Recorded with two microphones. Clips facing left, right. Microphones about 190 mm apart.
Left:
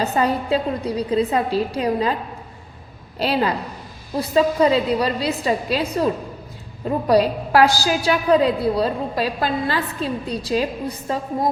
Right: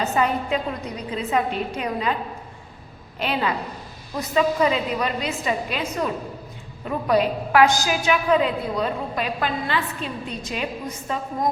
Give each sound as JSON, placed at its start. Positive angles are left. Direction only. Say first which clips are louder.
{"t": 0.0, "sound": "a woman's voice", "louder": "left 2 dB", "side_deg": 35}
{"t": 3.2, "sound": "a woman's voice", "louder": "left 4 dB", "side_deg": 35}